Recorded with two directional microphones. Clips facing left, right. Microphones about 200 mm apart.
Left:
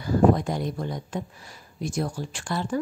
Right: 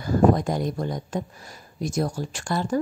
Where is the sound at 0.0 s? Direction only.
45° right (ahead or behind).